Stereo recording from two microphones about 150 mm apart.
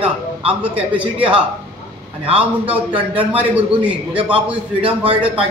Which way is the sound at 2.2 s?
40° right (ahead or behind).